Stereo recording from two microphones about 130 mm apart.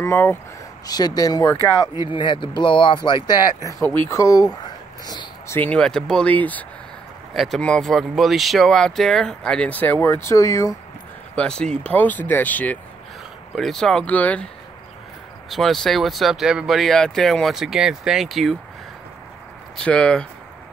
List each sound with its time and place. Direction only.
0.0 s speech: 15° left (ahead or behind)
0.8 s speech: 30° left (ahead or behind)
2.0 s speech: 40° left (ahead or behind)
5.5 s speech: 10° left (ahead or behind)
7.3 s speech: centre (ahead or behind); by 10.7 s 25° left (ahead or behind)
11.3 s speech: 5° left (ahead or behind)
15.5 s speech: centre (ahead or behind)
19.8 s speech: 5° left (ahead or behind)